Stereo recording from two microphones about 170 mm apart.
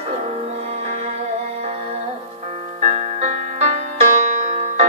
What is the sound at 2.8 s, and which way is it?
Music, 40° right (ahead or behind).